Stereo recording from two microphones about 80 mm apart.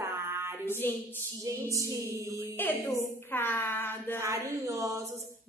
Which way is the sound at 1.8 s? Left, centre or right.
Right.